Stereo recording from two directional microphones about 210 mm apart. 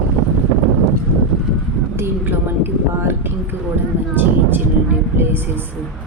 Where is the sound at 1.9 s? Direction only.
10° right (ahead or behind).